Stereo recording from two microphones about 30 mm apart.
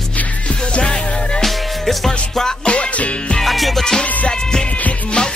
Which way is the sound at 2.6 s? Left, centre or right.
Left.